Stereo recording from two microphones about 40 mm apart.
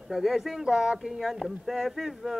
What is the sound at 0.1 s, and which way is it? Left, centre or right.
Choir, centre.